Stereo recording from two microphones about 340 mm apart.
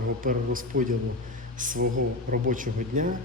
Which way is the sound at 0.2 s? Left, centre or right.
Right.